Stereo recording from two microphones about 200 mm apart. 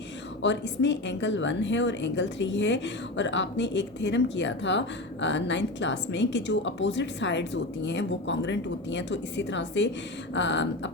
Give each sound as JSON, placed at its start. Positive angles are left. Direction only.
{"t": 0.4, "sound": "a woman's voice", "side_deg": 65}